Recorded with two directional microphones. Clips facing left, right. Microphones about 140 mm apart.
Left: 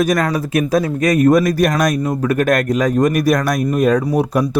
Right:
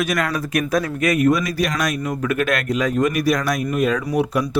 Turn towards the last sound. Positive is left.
turn(degrees=40)  # may be behind; listen again after turning